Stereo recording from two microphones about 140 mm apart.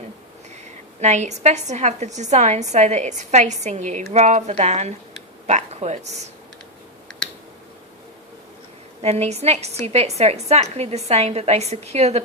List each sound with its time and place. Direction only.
1.0 s a woman's voice: 55° right (ahead or behind)
9.0 s a woman's voice: 50° right (ahead or behind)